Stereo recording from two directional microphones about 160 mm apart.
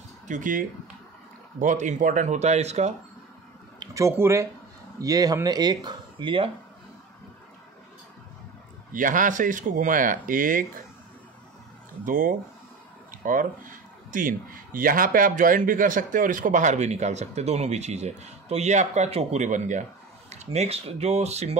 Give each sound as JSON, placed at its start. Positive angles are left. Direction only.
{"t": 0.3, "sound": "speech", "side_deg": -55}
{"t": 3.8, "sound": "speech", "side_deg": -20}
{"t": 8.9, "sound": "speech", "side_deg": -55}
{"t": 12.1, "sound": "speech", "side_deg": -60}